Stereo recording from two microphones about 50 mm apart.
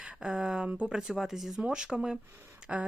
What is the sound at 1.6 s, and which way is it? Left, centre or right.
Speech, centre.